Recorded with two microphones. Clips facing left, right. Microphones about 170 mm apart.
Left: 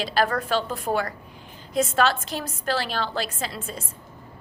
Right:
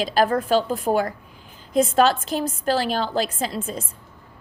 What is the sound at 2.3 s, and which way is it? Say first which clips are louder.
A woman's voice: right 5 dB; 45° right (ahead or behind).